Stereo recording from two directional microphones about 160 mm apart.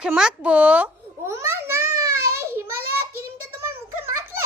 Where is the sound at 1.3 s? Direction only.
15° right (ahead or behind).